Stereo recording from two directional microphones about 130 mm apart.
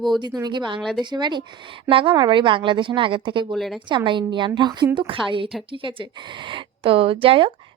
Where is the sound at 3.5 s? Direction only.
Centre (ahead or behind).